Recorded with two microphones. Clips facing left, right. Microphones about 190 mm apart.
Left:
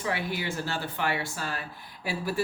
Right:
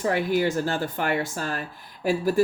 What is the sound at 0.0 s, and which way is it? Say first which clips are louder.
Speech: right 9 dB; 45° right (ahead or behind).